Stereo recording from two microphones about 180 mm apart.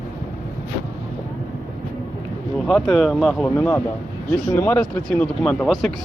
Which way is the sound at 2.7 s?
Centre (ahead or behind).